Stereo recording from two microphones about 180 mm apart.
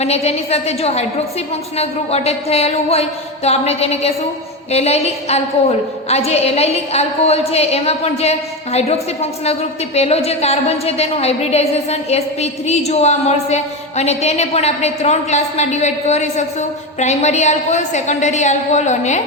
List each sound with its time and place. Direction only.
0.0 s a woman's voice: 35° left (ahead or behind)